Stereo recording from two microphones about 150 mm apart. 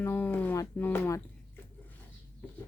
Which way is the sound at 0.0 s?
15° left (ahead or behind).